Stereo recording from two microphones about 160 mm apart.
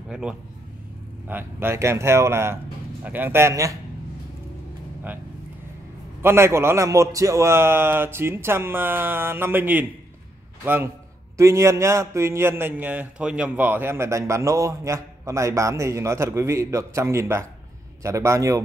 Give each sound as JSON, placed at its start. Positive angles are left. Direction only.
{"t": 0.1, "sound": "a man's voice", "side_deg": -5}
{"t": 6.2, "sound": "a man's voice", "side_deg": -15}